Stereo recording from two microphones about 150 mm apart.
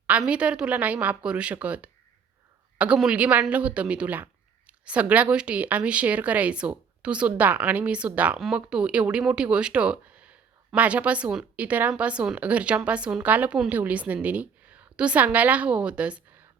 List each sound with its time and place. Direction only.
0.1 s a woman's voice: 5° right (ahead or behind)